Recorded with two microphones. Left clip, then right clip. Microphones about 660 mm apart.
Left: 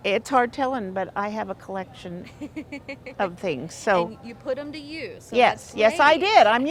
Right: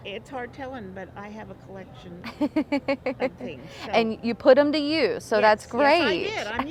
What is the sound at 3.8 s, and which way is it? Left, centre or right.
A woman's voice, right.